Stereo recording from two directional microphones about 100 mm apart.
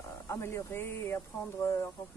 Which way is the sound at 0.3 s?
30° left (ahead or behind).